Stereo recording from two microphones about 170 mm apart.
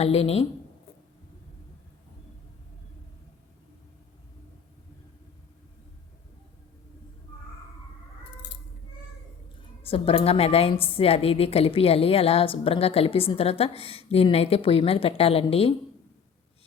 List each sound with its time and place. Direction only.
0.0 s a woman's voice: 35° left (ahead or behind)
9.8 s a woman's voice: 35° left (ahead or behind)